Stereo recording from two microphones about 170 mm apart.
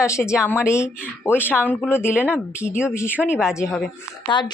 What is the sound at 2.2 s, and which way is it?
Speech, 10° right (ahead or behind).